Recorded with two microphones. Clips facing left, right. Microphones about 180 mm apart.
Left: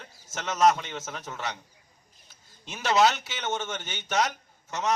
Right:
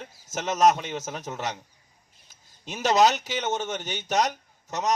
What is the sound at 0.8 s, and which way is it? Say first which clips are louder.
Speech: right 4 dB; 40° right (ahead or behind).